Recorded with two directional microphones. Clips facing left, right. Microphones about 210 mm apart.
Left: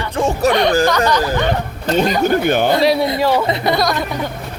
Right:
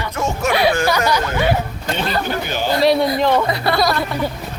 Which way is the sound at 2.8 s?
Centre (ahead or behind).